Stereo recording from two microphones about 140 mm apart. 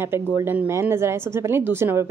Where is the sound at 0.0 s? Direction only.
15° right (ahead or behind).